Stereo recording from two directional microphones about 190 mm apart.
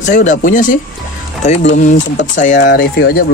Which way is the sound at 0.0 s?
40° left (ahead or behind).